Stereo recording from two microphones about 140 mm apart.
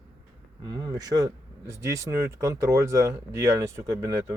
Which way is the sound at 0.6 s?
30° right (ahead or behind).